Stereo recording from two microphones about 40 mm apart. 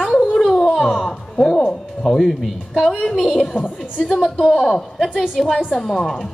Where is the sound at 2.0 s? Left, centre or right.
Centre.